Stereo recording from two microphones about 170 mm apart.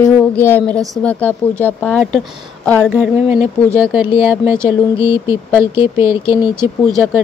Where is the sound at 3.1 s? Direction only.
10° right (ahead or behind).